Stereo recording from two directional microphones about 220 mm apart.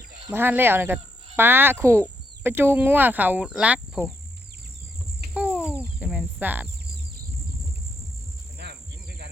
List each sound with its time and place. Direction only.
0.3 s speech: 10° right (ahead or behind)
5.5 s chicken: 10° left (ahead or behind)
6.0 s speech: 5° right (ahead or behind)
8.5 s cricket: 50° right (ahead or behind)